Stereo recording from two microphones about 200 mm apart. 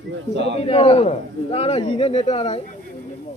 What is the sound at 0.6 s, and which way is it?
A man's voice, 30° left (ahead or behind).